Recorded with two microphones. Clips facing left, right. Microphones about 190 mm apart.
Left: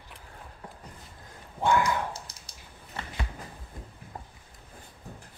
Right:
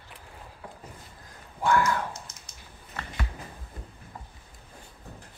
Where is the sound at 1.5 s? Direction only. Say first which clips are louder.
Even; 20° left (ahead or behind).